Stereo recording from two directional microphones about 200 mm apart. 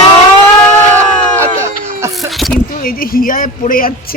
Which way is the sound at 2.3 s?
Centre (ahead or behind).